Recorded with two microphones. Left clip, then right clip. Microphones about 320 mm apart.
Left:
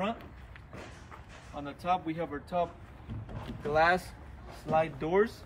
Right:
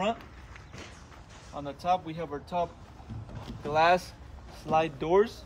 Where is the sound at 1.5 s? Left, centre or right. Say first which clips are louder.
Right 3 dB; centre.